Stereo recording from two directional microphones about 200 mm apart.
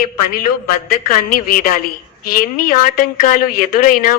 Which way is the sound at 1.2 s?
45° left (ahead or behind).